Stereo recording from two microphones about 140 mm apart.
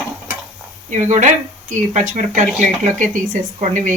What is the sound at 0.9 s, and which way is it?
A woman's voice, 60° right (ahead or behind).